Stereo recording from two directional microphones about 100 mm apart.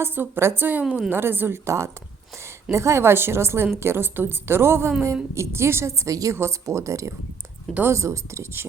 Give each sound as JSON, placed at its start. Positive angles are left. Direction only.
{"t": 0.0, "sound": "a woman's voice", "side_deg": -20}
{"t": 0.9, "sound": "a woman's voice", "side_deg": 0}
{"t": 1.1, "sound": "a woman's voice", "side_deg": -20}
{"t": 7.7, "sound": "a woman's voice", "side_deg": -20}
{"t": 7.9, "sound": "a woman's voice", "side_deg": -30}